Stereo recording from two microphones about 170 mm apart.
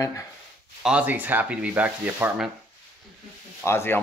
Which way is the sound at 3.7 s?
15° left (ahead or behind).